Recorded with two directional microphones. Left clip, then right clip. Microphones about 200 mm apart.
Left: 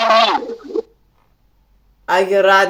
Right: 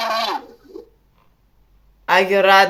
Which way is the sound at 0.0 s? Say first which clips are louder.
Left 9 dB; 40° left (ahead or behind).